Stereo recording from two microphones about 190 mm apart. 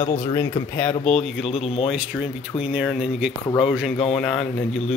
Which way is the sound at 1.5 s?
30° left (ahead or behind).